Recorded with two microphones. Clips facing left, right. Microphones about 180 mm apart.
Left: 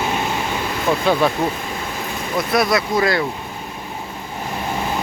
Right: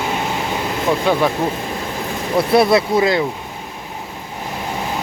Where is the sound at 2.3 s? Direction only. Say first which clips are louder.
Right 5 dB; 30° right (ahead or behind).